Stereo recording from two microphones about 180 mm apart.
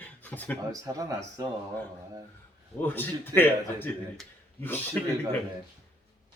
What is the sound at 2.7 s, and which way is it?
A man's voice, 10° left (ahead or behind).